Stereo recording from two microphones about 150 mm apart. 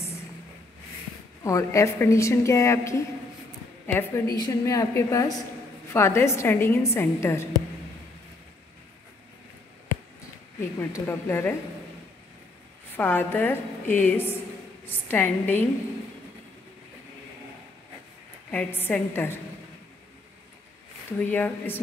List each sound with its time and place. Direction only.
1.4 s a woman's voice: 20° left (ahead or behind)
11.1 s a woman's voice: 15° left (ahead or behind)
12.9 s a woman's voice: 15° left (ahead or behind)
18.5 s a woman's voice: 10° left (ahead or behind)
21.2 s a woman's voice: 15° left (ahead or behind)